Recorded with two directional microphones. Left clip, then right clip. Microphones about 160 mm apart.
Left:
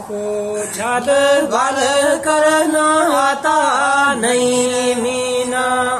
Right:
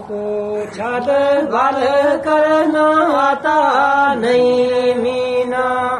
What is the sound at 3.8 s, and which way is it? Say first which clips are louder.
Mantra: right 1 dB; 20° left (ahead or behind).